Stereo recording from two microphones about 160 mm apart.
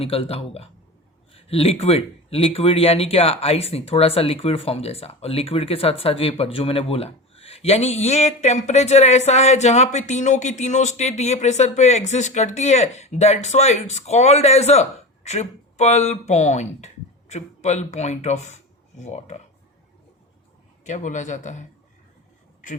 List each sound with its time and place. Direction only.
0.0 s speech: 35° left (ahead or behind)
20.8 s speech: 50° left (ahead or behind)